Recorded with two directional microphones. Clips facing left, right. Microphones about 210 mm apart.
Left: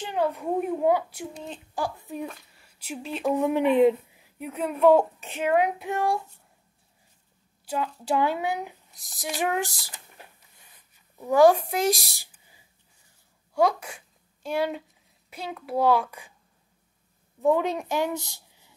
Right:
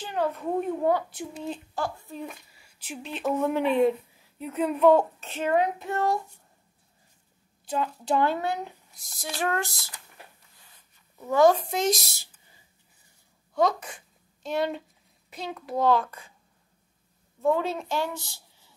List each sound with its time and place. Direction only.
0.1 s speech: 10° left (ahead or behind)
1.3 s speech: 5° right (ahead or behind)
1.8 s speech: 15° left (ahead or behind)
2.2 s speech: centre (ahead or behind)
3.3 s speech: 15° left (ahead or behind)
4.4 s speech: 10° left (ahead or behind)
7.6 s speech: 10° left (ahead or behind)
11.2 s speech: 15° left (ahead or behind)
13.6 s speech: 10° left (ahead or behind)
17.4 s a woman's voice: 15° left (ahead or behind)